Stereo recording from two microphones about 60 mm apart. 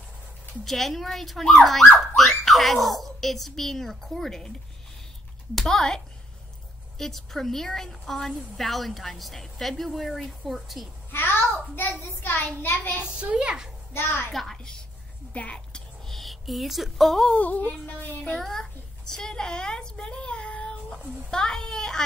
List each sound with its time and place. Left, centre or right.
0.7 s a woman's voice: centre
11.1 s a sound: left
12.1 s a child's voice: left
13.0 s a woman's voice: centre
14.3 s a woman's voice: centre
15.3 s a sound: centre
16.2 s speech: centre
17.3 s speech: left
18.4 s a woman's voice: centre
21.3 s a sound: centre